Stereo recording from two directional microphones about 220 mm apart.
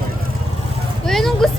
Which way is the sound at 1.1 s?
Centre (ahead or behind).